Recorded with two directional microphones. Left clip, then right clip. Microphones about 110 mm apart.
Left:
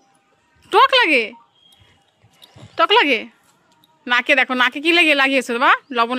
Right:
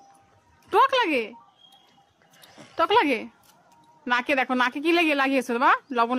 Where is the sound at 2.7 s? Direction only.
20° left (ahead or behind).